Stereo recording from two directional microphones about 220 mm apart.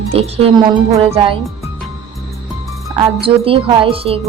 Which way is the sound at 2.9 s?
25° right (ahead or behind).